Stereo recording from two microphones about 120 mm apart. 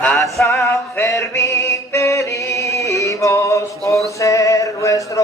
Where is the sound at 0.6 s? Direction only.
25° left (ahead or behind).